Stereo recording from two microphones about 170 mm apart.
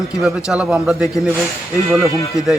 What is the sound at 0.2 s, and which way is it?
A man's voice, centre (ahead or behind).